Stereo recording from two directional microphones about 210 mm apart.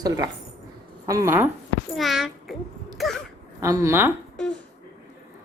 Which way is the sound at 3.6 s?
15° right (ahead or behind).